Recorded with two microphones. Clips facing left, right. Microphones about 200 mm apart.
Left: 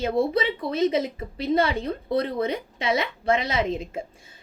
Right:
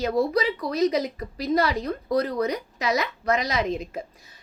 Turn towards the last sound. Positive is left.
turn(degrees=25)  # may be behind; listen again after turning